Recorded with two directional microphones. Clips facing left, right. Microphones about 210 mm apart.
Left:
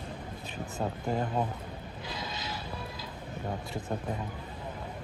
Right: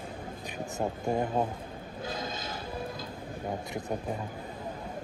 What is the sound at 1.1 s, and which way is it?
Speech, 20° right (ahead or behind).